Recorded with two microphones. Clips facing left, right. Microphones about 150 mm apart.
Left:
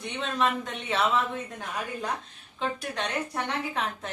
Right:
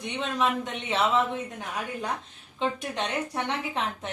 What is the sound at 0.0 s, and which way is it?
A woman's voice, 15° right (ahead or behind).